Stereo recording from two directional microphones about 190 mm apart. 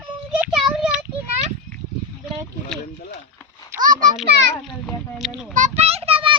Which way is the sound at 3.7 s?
45° right (ahead or behind).